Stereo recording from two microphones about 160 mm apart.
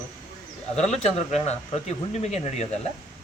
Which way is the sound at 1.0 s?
40° left (ahead or behind).